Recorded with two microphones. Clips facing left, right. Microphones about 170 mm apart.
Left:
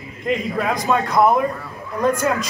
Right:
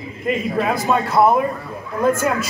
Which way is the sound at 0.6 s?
5° right (ahead or behind).